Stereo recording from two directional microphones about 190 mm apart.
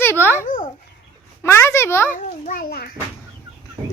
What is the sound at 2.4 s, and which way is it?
Speech, 50° left (ahead or behind).